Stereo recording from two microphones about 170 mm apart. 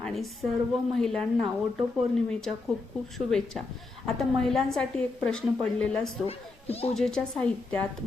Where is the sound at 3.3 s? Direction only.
5° left (ahead or behind).